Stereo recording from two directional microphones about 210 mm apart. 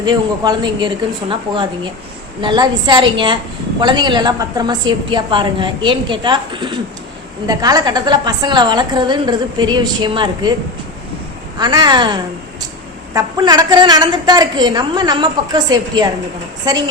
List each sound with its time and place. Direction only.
0.0 s a woman's voice: 20° right (ahead or behind)
11.5 s a woman's voice: 20° right (ahead or behind)